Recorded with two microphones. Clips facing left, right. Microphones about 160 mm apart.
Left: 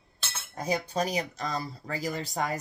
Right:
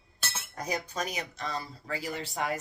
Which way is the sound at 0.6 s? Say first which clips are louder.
Left 5 dB; 30° left (ahead or behind).